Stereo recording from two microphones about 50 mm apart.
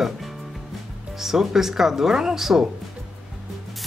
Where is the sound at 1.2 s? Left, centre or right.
Centre.